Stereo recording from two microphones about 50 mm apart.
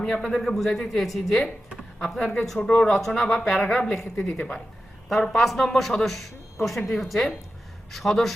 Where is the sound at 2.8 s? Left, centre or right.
Centre.